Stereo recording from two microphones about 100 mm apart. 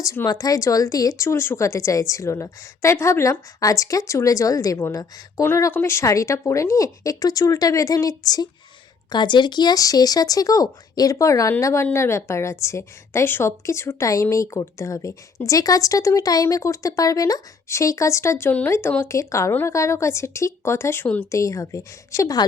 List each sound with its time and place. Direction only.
0.3 s a woman's voice: 35° left (ahead or behind)